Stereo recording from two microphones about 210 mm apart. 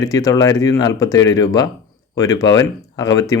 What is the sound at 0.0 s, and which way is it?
Speech, 15° left (ahead or behind).